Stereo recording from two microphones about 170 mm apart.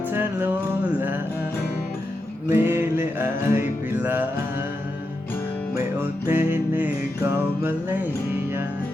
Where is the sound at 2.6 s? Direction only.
15° right (ahead or behind).